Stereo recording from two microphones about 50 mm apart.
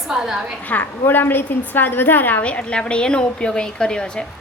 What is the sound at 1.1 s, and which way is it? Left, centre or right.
A woman's voice, left.